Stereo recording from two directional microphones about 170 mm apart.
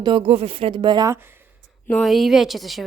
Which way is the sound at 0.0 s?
30° right (ahead or behind).